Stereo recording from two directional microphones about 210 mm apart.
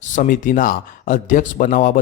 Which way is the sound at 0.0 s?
35° left (ahead or behind).